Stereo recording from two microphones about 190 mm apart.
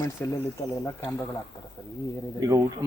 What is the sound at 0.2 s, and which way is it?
Speech, 10° left (ahead or behind).